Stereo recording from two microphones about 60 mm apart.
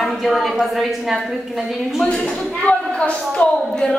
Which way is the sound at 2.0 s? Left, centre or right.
Centre.